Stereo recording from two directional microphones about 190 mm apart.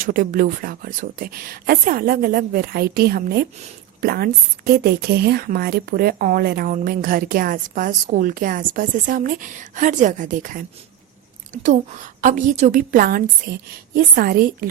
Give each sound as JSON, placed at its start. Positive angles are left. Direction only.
{"t": 0.0, "sound": "a woman's voice", "side_deg": -45}